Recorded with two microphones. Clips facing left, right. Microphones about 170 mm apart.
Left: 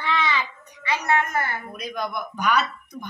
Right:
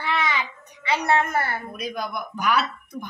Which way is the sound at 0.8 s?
30° right (ahead or behind).